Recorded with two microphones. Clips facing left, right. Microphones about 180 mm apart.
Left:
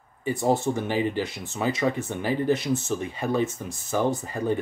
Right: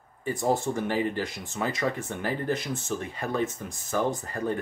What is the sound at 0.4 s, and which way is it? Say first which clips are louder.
Speech: left 2 dB; 25° left (ahead or behind).